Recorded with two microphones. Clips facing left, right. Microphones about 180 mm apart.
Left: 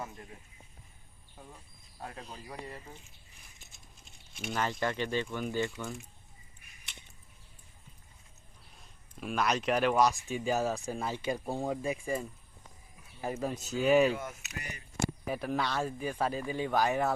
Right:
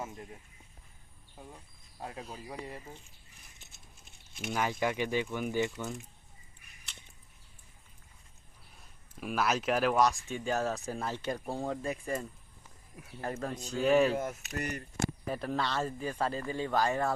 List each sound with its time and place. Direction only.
2.0 s speech: 15° right (ahead or behind)
4.4 s speech: 5° right (ahead or behind)
5.7 s speech: centre (ahead or behind)
9.2 s speech: 5° right (ahead or behind)
14.1 s speech: 40° right (ahead or behind)
15.0 s speech: 5° left (ahead or behind)